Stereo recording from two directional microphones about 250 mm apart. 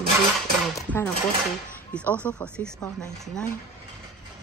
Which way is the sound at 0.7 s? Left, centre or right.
Centre.